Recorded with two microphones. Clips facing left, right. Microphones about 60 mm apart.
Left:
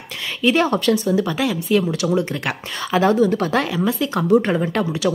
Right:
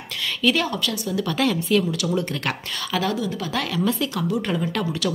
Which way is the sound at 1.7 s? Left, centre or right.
Left.